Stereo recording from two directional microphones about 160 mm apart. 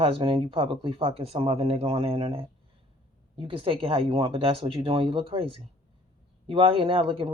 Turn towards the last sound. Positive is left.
turn(degrees=-35)  # may be behind; listen again after turning